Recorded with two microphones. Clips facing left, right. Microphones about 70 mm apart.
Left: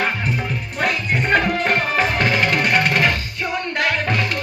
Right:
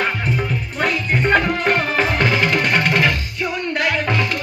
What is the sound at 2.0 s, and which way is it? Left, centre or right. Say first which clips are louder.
Music: right 1 dB; left.